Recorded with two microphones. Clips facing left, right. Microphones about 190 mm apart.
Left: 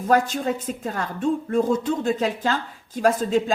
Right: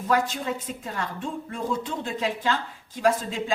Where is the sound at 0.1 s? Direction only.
45° left (ahead or behind).